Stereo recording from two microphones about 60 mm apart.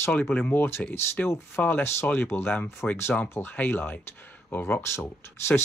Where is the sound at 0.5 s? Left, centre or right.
Left.